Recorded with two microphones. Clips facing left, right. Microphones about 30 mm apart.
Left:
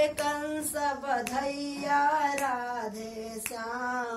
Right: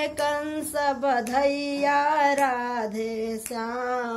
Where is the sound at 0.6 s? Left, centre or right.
Right.